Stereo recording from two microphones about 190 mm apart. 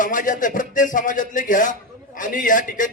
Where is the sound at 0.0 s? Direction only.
45° left (ahead or behind).